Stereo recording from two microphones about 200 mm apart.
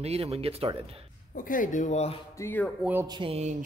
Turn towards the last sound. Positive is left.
turn(degrees=-30)  # may be behind; listen again after turning